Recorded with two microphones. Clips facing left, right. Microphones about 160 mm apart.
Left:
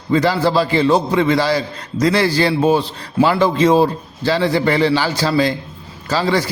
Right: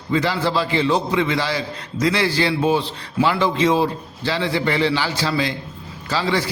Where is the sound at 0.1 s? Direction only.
40° left (ahead or behind).